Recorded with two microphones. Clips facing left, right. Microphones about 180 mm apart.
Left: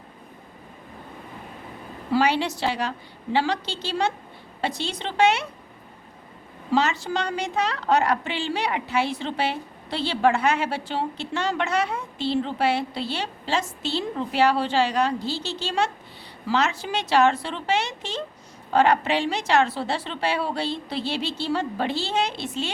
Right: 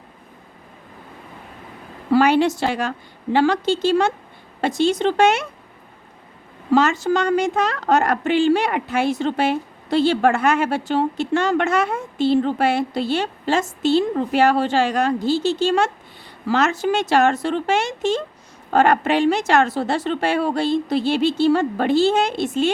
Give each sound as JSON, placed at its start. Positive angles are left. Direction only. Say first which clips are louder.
{"t": 2.0, "sound": "a woman's voice", "louder": "right 7 dB", "side_deg": -50}
{"t": 6.7, "sound": "a woman's voice", "louder": "right 6 dB", "side_deg": -50}